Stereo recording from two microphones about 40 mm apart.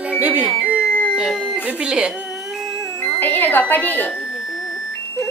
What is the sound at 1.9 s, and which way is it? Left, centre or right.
Speech, right.